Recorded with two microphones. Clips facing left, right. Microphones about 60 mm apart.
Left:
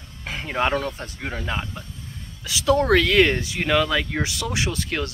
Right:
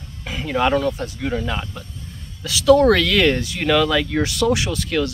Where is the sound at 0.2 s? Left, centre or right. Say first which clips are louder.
Right 2 dB; left.